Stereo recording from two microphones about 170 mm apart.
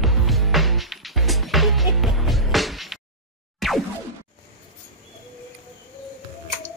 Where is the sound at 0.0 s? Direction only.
Centre (ahead or behind).